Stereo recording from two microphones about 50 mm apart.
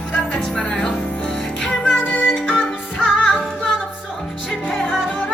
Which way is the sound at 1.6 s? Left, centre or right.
Centre.